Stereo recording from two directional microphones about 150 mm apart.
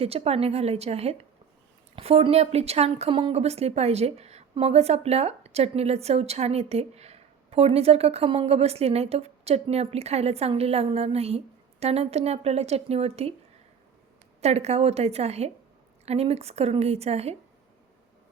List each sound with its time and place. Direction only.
0.0 s a woman's voice: 40° right (ahead or behind)
14.4 s a woman's voice: 45° right (ahead or behind)